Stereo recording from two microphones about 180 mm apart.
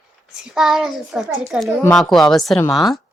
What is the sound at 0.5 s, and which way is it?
A child's voice, centre (ahead or behind).